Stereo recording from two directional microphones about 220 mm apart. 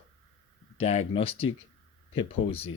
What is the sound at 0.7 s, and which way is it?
Speech, 30° left (ahead or behind).